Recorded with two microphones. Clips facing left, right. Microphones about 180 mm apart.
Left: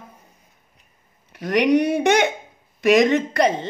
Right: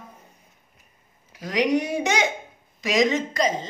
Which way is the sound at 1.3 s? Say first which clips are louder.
Left 5 dB; 65° left (ahead or behind).